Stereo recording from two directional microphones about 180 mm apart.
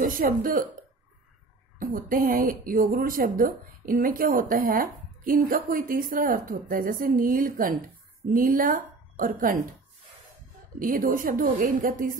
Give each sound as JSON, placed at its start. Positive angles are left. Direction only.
{"t": 0.0, "sound": "a woman's voice", "side_deg": -50}
{"t": 1.8, "sound": "a woman's voice", "side_deg": -50}
{"t": 10.8, "sound": "a woman's voice", "side_deg": -50}